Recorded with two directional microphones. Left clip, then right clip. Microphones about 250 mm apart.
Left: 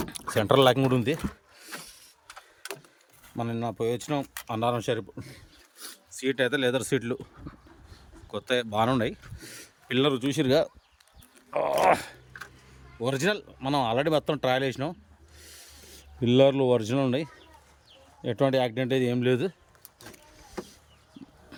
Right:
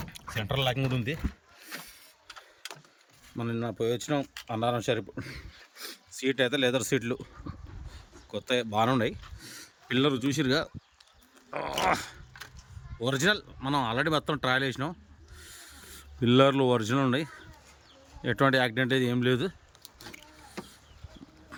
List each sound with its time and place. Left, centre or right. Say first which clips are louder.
0.0 s speech: left 9 dB; left
3.3 s speech: left 2 dB; centre
8.3 s speech: left 2 dB; centre
11.7 s speech: left 5 dB; centre
15.4 s a sound: right 1 dB; centre
18.2 s speech: even; centre
21.2 s livestock: left 4 dB; centre